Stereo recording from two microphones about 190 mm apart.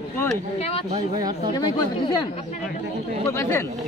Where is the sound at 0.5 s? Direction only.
30° left (ahead or behind).